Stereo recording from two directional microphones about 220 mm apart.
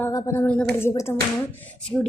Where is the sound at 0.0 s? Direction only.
15° left (ahead or behind).